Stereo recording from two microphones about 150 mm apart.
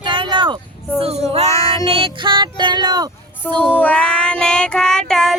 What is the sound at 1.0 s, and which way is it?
Speech, 40° right (ahead or behind).